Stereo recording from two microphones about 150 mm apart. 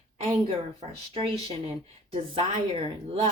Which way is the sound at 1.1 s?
35° right (ahead or behind).